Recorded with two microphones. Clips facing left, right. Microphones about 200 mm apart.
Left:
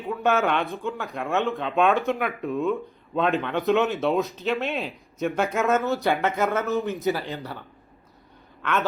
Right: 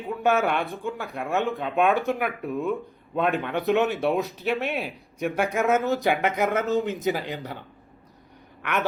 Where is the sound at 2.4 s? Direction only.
15° right (ahead or behind).